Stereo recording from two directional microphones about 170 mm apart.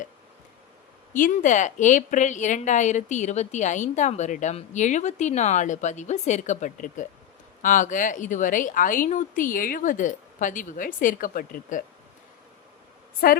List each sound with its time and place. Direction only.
1.1 s a woman's voice: 50° left (ahead or behind)
13.2 s a woman's voice: 60° left (ahead or behind)